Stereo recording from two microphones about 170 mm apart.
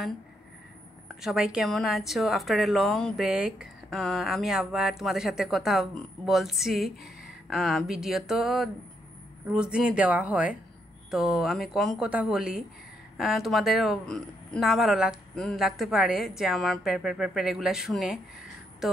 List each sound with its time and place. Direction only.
1.2 s a woman's voice: 5° right (ahead or behind)